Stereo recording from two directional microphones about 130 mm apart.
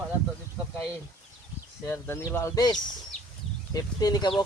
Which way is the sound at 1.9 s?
15° left (ahead or behind).